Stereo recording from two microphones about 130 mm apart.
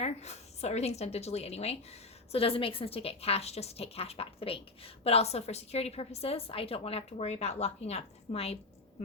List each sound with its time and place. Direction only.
0.0 s a woman's voice: 55° left (ahead or behind)